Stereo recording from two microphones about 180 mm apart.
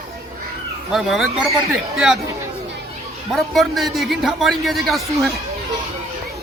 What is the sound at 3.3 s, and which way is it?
A man's voice, centre (ahead or behind).